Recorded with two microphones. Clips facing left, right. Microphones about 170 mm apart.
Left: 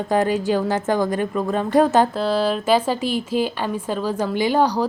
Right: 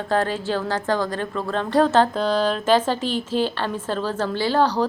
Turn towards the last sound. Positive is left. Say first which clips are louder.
# left 1 dB
turn(degrees=10)  # may be behind; listen again after turning